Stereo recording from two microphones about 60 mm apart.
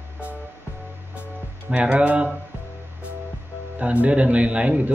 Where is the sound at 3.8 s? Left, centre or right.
Right.